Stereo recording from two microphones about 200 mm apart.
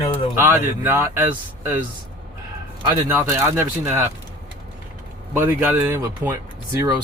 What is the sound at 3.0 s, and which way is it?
Speech, 10° right (ahead or behind).